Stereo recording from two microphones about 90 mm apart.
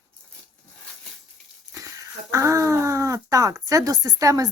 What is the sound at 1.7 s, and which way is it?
Speech, 35° right (ahead or behind).